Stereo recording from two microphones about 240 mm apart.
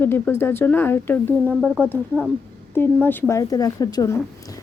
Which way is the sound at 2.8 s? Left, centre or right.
Centre.